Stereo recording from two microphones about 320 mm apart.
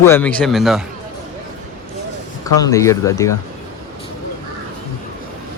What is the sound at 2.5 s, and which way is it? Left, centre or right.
Speech, centre.